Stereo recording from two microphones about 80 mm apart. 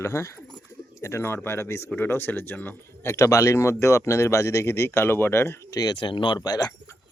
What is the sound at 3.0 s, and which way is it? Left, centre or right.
Speech, left.